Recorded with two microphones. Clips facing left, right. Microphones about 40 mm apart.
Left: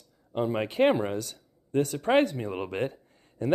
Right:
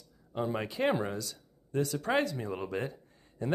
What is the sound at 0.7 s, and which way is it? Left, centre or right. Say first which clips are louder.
Speech: left 8 dB; left.